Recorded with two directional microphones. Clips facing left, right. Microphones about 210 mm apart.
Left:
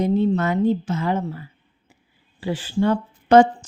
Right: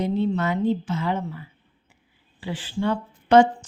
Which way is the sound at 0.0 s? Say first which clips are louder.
Left 4 dB; 45° left (ahead or behind).